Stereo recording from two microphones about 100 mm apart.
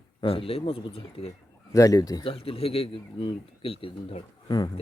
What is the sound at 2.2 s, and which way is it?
Speech, 70° left (ahead or behind).